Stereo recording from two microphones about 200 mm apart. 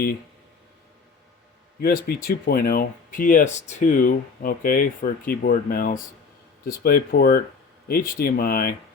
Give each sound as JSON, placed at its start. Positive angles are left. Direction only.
{"t": 1.8, "sound": "speech", "side_deg": 50}